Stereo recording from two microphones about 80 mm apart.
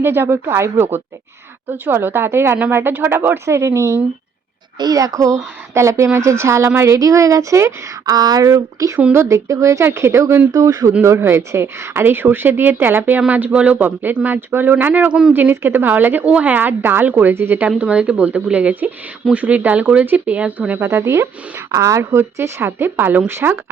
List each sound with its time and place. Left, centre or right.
0.0 s a woman's voice: right
4.8 s speech: right
10.5 s speech: right
11.0 s a woman's voice: right
17.7 s a woman's voice: centre; by 23.6 s right